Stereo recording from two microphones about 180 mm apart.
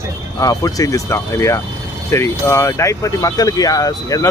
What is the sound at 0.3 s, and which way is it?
Speech, 20° left (ahead or behind).